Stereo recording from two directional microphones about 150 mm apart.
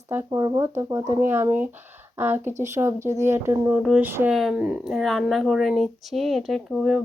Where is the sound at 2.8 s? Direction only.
15° right (ahead or behind).